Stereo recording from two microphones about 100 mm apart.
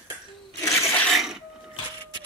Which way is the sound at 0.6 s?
30° left (ahead or behind).